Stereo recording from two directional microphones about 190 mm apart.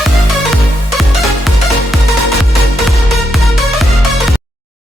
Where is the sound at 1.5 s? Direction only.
Centre (ahead or behind).